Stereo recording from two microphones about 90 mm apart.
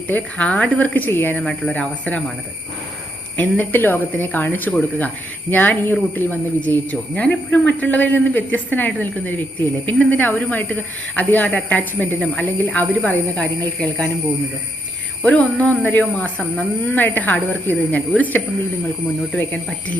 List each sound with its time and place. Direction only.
0.1 s a woman's voice: 15° left (ahead or behind)
3.3 s a woman's voice: 20° left (ahead or behind)
15.2 s a woman's voice: 15° left (ahead or behind)